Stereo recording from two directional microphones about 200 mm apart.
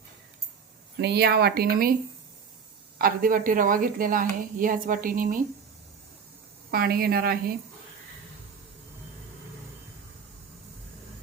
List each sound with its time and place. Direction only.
0.9 s a woman's voice: 55° right (ahead or behind)
3.0 s a woman's voice: 45° right (ahead or behind)
6.7 s a woman's voice: 50° right (ahead or behind)